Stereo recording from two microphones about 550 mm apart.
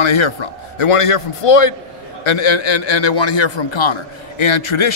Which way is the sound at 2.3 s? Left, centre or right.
Left.